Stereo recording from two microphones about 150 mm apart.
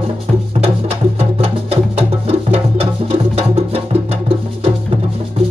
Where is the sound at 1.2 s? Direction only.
40° right (ahead or behind).